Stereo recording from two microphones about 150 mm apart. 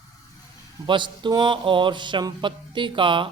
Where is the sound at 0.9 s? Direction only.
30° right (ahead or behind).